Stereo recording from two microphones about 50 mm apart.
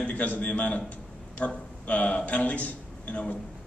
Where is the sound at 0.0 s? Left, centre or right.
Left.